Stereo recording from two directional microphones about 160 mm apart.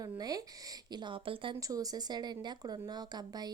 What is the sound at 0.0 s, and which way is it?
Speech, 25° right (ahead or behind).